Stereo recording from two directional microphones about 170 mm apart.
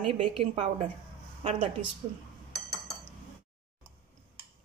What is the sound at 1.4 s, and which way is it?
Speech, 40° right (ahead or behind).